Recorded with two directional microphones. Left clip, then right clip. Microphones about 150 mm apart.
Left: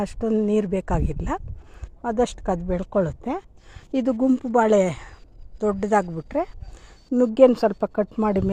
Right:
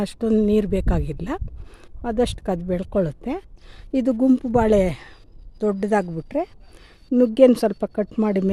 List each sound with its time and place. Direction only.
0.0 s a woman's voice: 25° right (ahead or behind)
5.5 s speech: 35° right (ahead or behind)
6.1 s speech: 20° right (ahead or behind)